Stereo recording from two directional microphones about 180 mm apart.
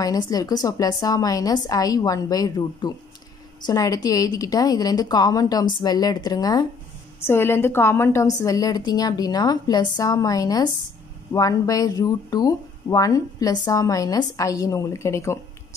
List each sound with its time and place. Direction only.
0.0 s a woman's voice: 20° left (ahead or behind)